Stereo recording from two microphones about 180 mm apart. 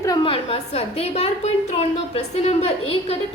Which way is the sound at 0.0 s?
25° left (ahead or behind).